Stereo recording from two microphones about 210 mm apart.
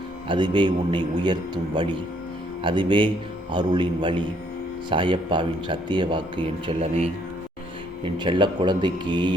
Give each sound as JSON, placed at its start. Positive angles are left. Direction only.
{"t": 0.3, "sound": "a man's voice", "side_deg": -20}